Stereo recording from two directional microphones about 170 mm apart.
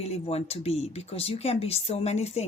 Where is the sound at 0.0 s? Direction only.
40° left (ahead or behind).